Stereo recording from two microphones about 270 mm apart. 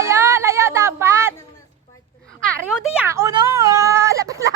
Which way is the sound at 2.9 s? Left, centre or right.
Centre.